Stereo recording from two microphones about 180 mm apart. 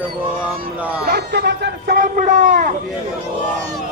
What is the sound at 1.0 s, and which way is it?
Speech, 65° right (ahead or behind).